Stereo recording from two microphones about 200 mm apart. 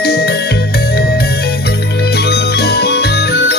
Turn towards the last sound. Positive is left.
turn(degrees=55)  # may be behind; listen again after turning